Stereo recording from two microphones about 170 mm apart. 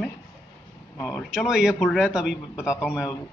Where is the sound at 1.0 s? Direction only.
Centre (ahead or behind).